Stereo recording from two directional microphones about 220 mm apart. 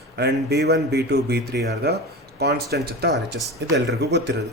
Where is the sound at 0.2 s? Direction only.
50° right (ahead or behind).